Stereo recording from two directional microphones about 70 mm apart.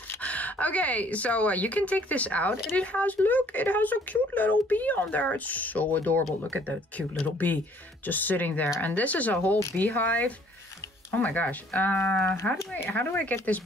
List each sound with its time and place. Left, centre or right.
0.2 s speech: left